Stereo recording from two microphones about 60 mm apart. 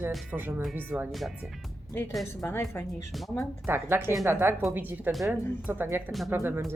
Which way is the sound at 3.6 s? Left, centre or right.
Right.